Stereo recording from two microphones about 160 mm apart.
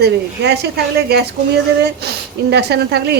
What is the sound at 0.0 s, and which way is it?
A woman's voice, 90° right.